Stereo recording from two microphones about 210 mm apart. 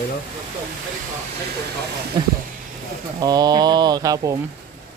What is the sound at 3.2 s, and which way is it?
Speech, 20° right (ahead or behind).